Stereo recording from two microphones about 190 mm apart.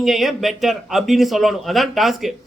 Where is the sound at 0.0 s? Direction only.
Centre (ahead or behind).